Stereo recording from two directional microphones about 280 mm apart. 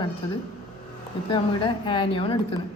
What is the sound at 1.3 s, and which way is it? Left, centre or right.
A woman's voice, centre.